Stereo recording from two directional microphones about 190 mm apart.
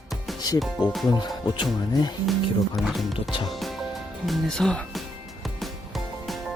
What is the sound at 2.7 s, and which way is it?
Speech, centre (ahead or behind).